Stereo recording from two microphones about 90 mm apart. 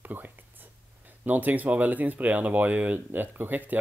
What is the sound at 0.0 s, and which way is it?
Speech, 20° right (ahead or behind).